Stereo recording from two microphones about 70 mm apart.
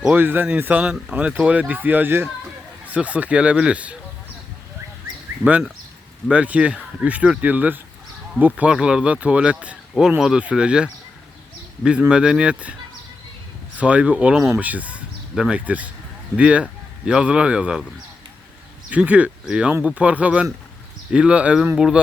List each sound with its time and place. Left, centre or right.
0.1 s speech: right
2.9 s speech: centre
5.5 s speech: centre
8.7 s speech: centre
10.2 s speech: centre
13.7 s speech: centre
18.9 s speech: centre